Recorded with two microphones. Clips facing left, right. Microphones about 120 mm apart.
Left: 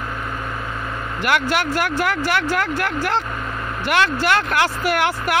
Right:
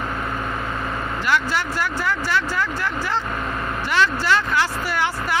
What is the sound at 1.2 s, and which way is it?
Speech, 65° left (ahead or behind).